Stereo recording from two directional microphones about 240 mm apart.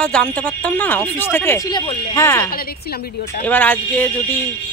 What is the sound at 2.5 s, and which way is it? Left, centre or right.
Speech, left.